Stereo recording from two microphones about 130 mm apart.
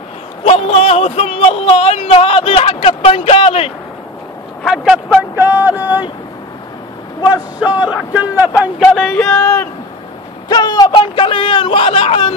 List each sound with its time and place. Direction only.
0.4 s speech: 50° left (ahead or behind)
4.6 s speech: centre (ahead or behind)
5.3 s speech: 15° right (ahead or behind)
7.2 s speech: 10° right (ahead or behind)
8.8 s speech: centre (ahead or behind)
10.5 s a man's voice: 35° left (ahead or behind)